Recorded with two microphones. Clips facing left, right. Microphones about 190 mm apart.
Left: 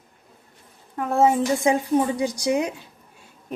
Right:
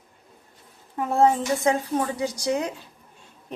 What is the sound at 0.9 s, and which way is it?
Speech, centre (ahead or behind).